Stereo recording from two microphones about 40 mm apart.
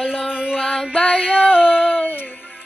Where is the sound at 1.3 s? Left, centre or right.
Left.